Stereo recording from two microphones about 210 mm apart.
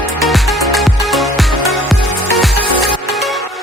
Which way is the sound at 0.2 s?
Centre (ahead or behind).